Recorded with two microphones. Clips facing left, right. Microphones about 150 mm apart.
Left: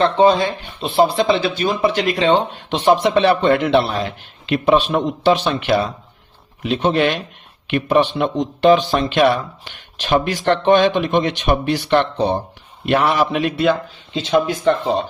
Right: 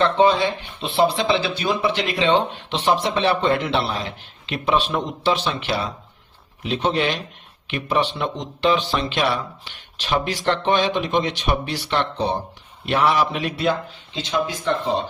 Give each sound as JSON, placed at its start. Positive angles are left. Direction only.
{"t": 0.0, "sound": "a man's voice", "side_deg": 40}